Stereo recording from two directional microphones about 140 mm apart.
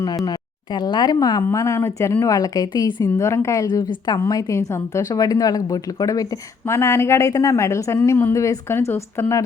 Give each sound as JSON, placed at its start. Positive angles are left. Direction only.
{"t": 0.3, "sound": "a woman's voice", "side_deg": 30}